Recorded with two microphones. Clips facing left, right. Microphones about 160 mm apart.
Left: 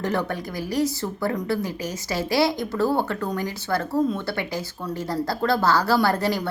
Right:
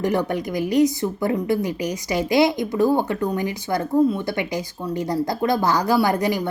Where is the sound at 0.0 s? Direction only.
15° right (ahead or behind).